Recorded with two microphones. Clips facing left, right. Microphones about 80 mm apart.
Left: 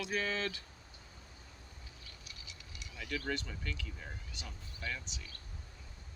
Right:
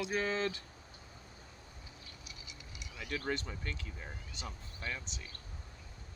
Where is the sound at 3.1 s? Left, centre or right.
Right.